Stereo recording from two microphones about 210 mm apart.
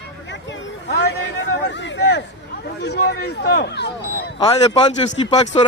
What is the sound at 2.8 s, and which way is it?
Speech, 55° left (ahead or behind).